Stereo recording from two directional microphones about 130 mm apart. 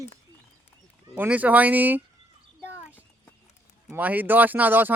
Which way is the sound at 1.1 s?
15° right (ahead or behind).